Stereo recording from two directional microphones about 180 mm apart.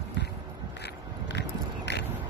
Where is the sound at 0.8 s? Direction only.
70° left (ahead or behind).